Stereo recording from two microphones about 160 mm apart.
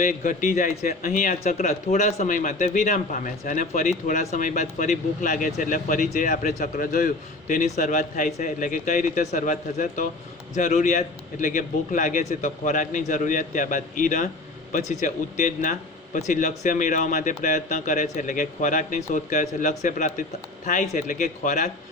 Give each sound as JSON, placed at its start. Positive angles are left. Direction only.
{"t": 0.0, "sound": "speech", "side_deg": 55}